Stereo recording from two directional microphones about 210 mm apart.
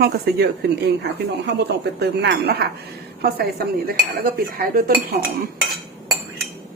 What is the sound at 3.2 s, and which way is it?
Speech, 50° right (ahead or behind).